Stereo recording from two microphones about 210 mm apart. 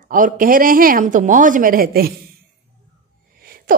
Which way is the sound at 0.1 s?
40° right (ahead or behind).